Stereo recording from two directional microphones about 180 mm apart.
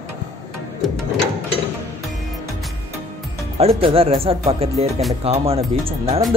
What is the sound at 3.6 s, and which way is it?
Speech, 35° right (ahead or behind).